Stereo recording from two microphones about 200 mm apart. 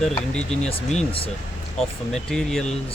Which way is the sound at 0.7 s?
30° left (ahead or behind).